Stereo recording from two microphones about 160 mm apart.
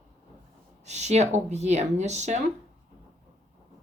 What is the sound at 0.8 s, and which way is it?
Speech, 45° right (ahead or behind).